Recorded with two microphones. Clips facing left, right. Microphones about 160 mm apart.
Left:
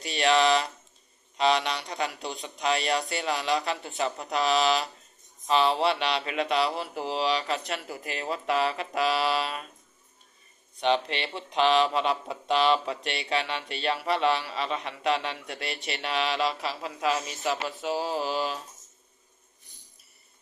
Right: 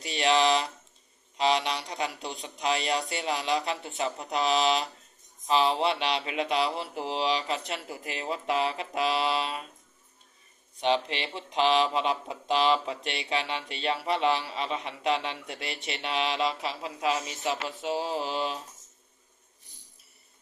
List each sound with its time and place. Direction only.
0.0 s a sound: 25° right (ahead or behind)
1.5 s speech: 25° right (ahead or behind)
11.5 s speech: 25° right (ahead or behind)